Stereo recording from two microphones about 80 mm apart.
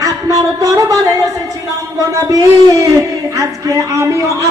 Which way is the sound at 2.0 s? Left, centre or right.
Right.